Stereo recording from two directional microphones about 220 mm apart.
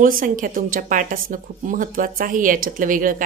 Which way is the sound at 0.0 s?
35° right (ahead or behind).